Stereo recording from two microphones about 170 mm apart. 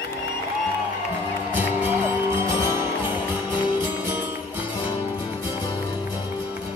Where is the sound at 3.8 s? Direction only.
10° right (ahead or behind).